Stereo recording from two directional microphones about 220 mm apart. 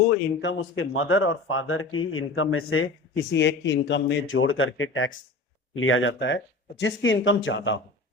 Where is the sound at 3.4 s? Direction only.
55° left (ahead or behind).